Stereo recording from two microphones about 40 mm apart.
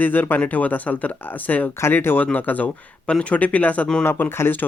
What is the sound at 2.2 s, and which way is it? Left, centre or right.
Speech, left.